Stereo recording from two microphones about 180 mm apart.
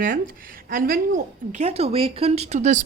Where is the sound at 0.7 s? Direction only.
50° right (ahead or behind).